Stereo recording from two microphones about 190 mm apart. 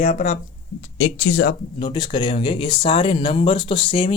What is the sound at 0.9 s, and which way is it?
Speech, 75° left (ahead or behind).